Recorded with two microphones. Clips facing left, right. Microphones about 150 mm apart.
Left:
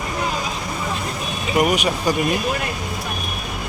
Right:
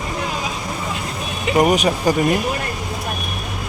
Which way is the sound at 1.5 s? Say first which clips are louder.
Right 3 dB; 40° right (ahead or behind).